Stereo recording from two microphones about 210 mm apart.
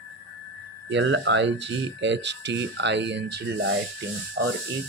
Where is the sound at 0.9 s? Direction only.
60° right (ahead or behind).